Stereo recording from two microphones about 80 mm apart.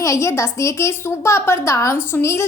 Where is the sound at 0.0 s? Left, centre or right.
Left.